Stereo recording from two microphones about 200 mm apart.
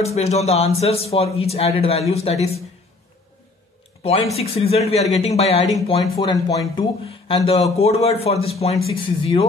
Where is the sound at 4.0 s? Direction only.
30° left (ahead or behind).